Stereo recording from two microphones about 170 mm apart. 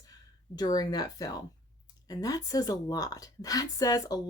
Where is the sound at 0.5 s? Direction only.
25° left (ahead or behind).